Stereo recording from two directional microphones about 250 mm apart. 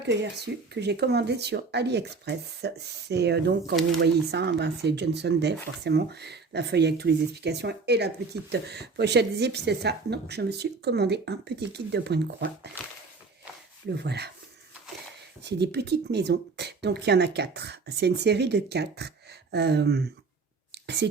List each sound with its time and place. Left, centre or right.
0.0 s speech: right
13.9 s speech: right
15.4 s speech: right
20.7 s a sound: right